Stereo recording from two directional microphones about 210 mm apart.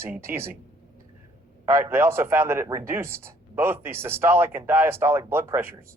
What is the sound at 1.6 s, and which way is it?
Speech, 15° right (ahead or behind).